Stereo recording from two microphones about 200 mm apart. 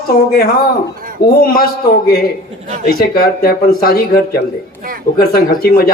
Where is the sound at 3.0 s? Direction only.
50° left (ahead or behind).